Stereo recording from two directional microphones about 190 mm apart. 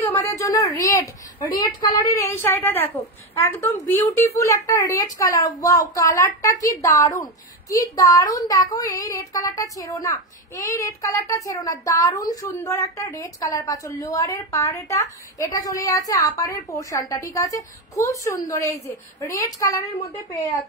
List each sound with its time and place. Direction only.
0.0 s a woman's voice: 15° left (ahead or behind)